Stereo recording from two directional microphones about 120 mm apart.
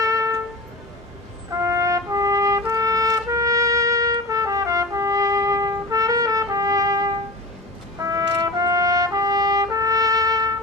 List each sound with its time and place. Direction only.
0.0 s music: 25° right (ahead or behind)
1.5 s trumpet: 25° right (ahead or behind)